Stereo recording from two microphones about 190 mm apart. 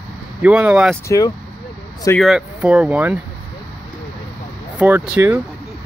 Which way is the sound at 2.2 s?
Centre (ahead or behind).